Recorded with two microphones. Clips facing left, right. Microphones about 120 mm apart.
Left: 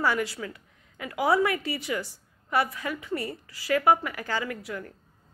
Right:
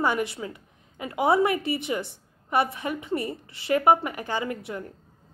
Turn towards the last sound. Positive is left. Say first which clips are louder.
# right 2 dB
turn(degrees=-25)  # may be behind; listen again after turning